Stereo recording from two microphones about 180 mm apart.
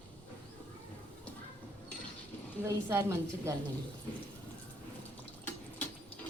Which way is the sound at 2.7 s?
15° right (ahead or behind).